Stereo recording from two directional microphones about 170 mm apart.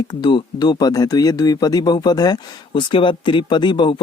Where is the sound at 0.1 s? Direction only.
25° left (ahead or behind).